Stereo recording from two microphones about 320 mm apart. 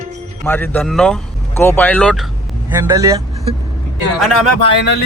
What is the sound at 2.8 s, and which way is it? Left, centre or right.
Speech, centre.